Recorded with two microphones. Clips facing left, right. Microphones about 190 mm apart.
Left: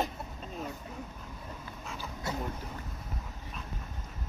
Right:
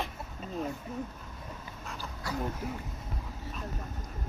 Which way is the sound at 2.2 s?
25° left (ahead or behind).